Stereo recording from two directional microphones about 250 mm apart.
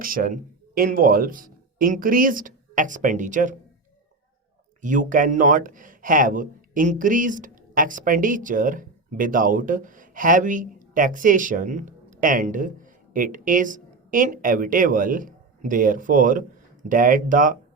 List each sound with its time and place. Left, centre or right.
0.0 s speech: right
4.8 s speech: right